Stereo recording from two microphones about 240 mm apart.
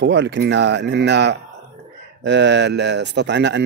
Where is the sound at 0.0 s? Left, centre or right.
Right.